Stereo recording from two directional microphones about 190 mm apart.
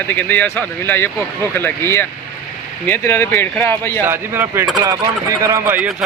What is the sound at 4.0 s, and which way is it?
Speech, 10° right (ahead or behind).